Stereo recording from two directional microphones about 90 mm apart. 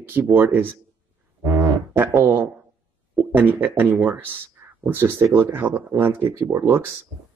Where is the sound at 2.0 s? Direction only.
20° right (ahead or behind).